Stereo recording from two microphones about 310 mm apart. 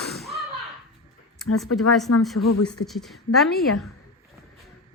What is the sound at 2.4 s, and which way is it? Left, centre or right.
Speech, left.